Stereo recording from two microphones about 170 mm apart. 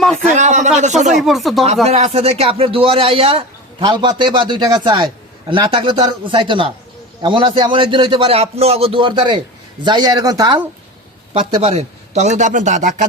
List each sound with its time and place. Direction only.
0.2 s a man's voice: 45° right (ahead or behind)
1.1 s speech: centre (ahead or behind)
1.9 s a man's voice: 40° right (ahead or behind); by 10.6 s 20° right (ahead or behind)
11.3 s a man's voice: 35° right (ahead or behind)